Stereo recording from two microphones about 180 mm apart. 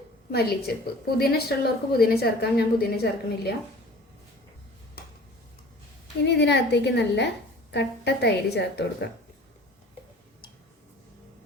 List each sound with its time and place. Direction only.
0.3 s a woman's voice: 60° left (ahead or behind)
6.2 s a woman's voice: 70° left (ahead or behind)